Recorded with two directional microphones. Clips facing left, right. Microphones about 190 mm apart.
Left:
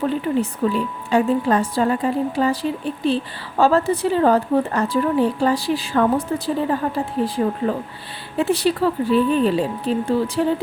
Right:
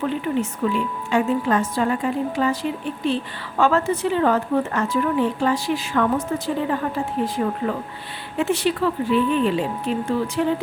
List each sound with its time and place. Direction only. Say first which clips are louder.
0.1 s a woman's voice: left 2 dB; 35° left (ahead or behind)